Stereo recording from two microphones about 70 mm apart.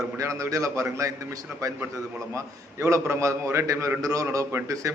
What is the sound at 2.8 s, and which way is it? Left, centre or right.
A man's voice, right.